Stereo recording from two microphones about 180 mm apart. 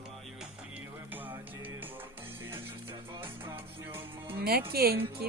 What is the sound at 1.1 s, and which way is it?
Music, 10° right (ahead or behind).